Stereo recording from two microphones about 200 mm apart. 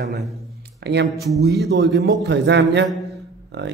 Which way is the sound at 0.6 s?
55° right (ahead or behind).